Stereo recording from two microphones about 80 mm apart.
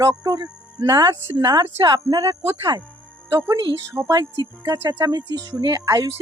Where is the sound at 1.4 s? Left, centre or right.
Right.